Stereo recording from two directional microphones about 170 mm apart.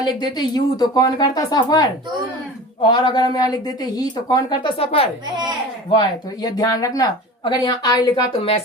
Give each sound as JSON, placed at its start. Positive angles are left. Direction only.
{"t": 0.2, "sound": "speech", "side_deg": 25}
{"t": 5.9, "sound": "a woman's voice", "side_deg": 25}